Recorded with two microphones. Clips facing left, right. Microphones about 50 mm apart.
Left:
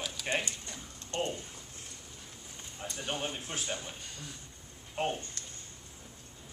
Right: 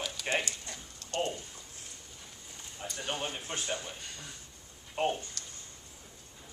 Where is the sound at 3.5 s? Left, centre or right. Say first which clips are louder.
Right 1 dB; centre.